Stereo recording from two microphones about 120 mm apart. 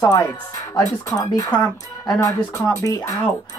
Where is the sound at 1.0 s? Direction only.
35° left (ahead or behind).